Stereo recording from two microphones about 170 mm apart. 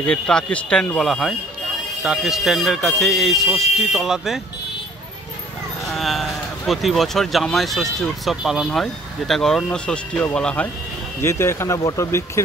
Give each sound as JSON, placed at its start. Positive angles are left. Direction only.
{"t": 0.0, "sound": "speech", "side_deg": 5}
{"t": 5.9, "sound": "speech", "side_deg": 0}